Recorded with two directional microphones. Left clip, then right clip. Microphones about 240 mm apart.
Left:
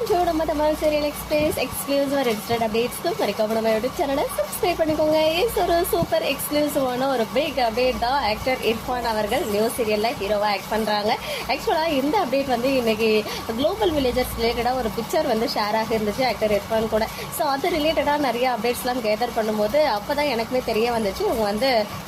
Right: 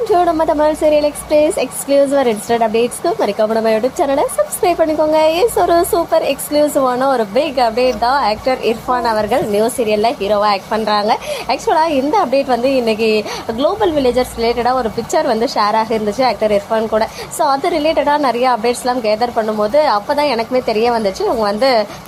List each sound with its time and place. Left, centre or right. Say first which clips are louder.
0.1 s a woman's voice: right 9 dB; right